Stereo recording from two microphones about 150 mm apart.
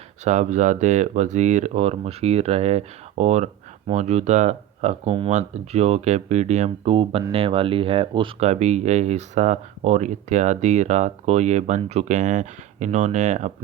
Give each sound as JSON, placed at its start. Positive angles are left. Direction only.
{"t": 0.3, "sound": "speech", "side_deg": -55}
{"t": 6.7, "sound": "speech", "side_deg": -35}
{"t": 8.4, "sound": "speech", "side_deg": -45}